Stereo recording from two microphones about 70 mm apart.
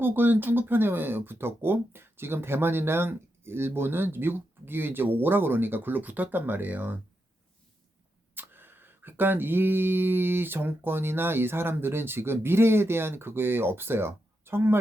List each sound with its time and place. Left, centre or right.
0.0 s speech: right
8.4 s speech: right